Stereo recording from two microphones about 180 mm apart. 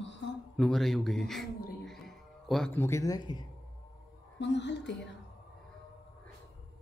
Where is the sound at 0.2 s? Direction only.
80° left.